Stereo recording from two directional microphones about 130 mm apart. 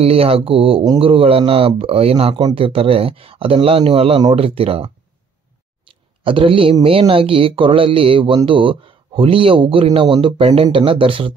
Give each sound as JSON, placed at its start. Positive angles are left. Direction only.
{"t": 0.0, "sound": "speech", "side_deg": -50}